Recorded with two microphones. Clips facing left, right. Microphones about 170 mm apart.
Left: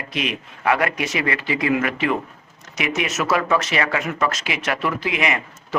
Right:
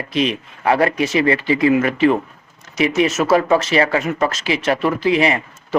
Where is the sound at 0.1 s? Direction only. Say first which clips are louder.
Right 7 dB; 30° right (ahead or behind).